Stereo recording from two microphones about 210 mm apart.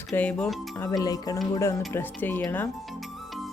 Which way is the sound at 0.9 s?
15° left (ahead or behind).